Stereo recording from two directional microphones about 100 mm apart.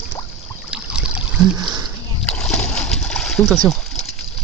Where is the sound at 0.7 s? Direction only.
10° right (ahead or behind).